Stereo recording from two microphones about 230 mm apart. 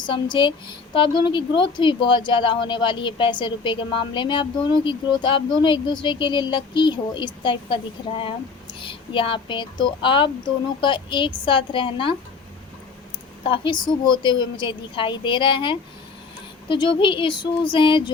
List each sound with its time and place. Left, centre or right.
0.0 s speech: centre
8.8 s speech: left
13.5 s speech: centre